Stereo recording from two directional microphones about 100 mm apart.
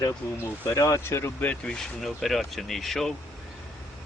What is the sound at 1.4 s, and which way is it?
Speech, 10° left (ahead or behind).